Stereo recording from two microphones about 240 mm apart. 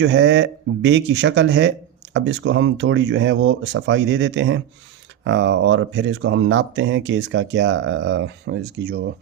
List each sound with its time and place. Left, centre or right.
0.0 s speech: right